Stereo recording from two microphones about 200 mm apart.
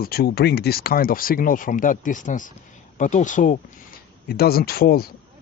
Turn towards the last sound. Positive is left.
turn(degrees=50)  # may be behind; listen again after turning